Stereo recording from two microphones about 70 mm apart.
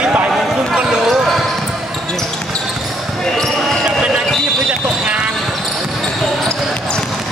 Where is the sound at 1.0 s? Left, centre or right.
Centre.